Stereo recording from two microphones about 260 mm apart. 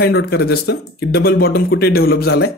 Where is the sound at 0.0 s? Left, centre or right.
Left.